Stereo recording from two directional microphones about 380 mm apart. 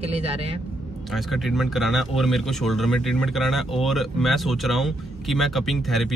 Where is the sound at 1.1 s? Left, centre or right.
Centre.